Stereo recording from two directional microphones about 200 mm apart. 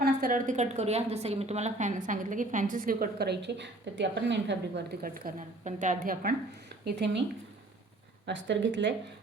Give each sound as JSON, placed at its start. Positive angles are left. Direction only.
{"t": 0.0, "sound": "a woman's voice", "side_deg": -45}
{"t": 6.8, "sound": "speech", "side_deg": -60}
{"t": 8.3, "sound": "speech", "side_deg": -60}